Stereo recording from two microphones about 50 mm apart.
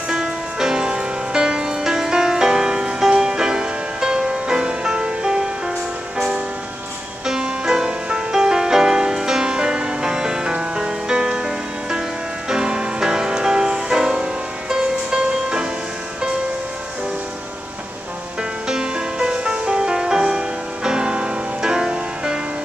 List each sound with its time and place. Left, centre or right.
0.1 s music: centre
18.7 s music: centre